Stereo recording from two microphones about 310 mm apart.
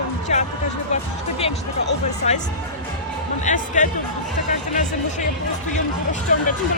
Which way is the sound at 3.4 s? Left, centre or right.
Left.